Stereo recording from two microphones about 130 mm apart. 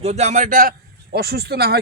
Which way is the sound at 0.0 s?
55° right (ahead or behind).